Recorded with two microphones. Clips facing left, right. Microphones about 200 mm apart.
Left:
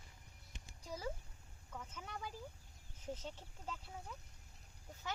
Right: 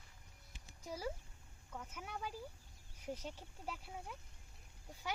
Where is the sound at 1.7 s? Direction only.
10° right (ahead or behind).